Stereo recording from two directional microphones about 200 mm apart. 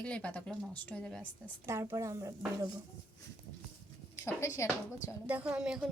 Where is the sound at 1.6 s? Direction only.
15° right (ahead or behind).